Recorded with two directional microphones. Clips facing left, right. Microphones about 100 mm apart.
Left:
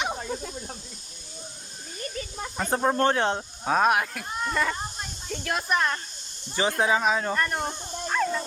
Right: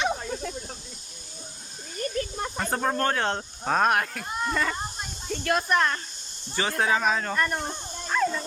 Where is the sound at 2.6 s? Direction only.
15° left (ahead or behind).